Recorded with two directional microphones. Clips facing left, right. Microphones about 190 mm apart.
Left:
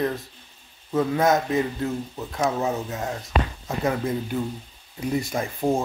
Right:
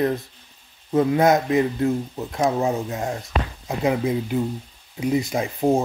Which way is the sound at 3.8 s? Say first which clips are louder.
Right 3 dB; 15° right (ahead or behind).